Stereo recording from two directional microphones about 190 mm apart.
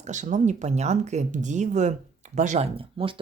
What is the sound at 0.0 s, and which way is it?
Speech, 40° right (ahead or behind).